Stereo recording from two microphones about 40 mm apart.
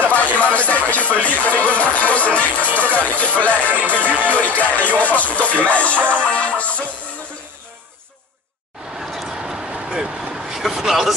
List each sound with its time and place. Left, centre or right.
0.0 s music: left
8.9 s a sound: centre
9.4 s vehicle: centre